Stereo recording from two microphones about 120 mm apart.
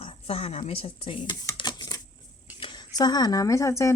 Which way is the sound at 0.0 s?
55° left (ahead or behind).